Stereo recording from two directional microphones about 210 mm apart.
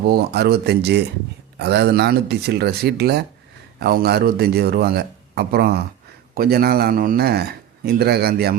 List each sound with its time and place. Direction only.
0.0 s a man's voice: 50° right (ahead or behind)